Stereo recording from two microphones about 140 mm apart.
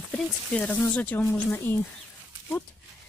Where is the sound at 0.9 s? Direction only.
10° left (ahead or behind).